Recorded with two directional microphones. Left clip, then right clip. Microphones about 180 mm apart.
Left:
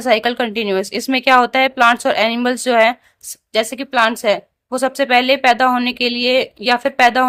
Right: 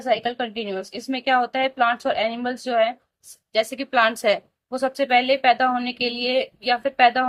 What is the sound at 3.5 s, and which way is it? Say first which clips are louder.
Speech: left 4 dB; 25° left (ahead or behind).